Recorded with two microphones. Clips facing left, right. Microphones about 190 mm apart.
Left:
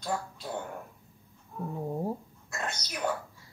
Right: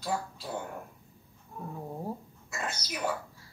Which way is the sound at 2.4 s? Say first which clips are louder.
Even; 5° right (ahead or behind).